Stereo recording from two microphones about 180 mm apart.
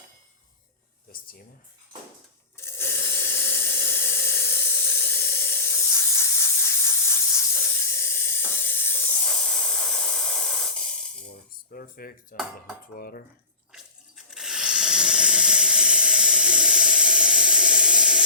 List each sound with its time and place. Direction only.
1.1 s speech: 55° left (ahead or behind)
2.6 s steam: 15° left (ahead or behind)
7.9 s hiss: 15° left (ahead or behind)
11.3 s cutlery: 55° left (ahead or behind)
13.0 s speech: 55° left (ahead or behind)
14.3 s a sound: 5° right (ahead or behind)